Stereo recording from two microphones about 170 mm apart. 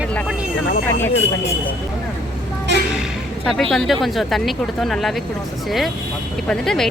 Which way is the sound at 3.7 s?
Centre (ahead or behind).